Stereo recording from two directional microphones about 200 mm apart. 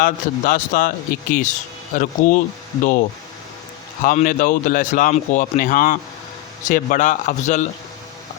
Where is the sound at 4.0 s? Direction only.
40° left (ahead or behind).